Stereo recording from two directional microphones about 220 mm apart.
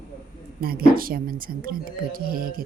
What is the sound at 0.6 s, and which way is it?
Speech, 45° right (ahead or behind).